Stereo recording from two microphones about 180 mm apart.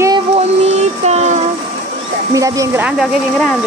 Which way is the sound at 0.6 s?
35° right (ahead or behind).